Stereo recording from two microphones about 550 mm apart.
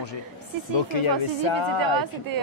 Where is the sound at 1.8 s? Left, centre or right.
Right.